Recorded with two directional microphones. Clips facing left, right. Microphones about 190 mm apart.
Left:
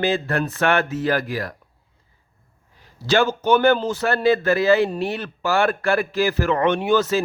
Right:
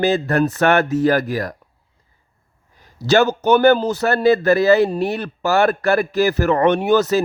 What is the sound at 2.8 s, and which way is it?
A man's voice, 40° right (ahead or behind).